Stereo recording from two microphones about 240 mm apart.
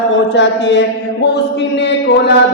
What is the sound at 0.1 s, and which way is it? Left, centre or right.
A man's voice, left.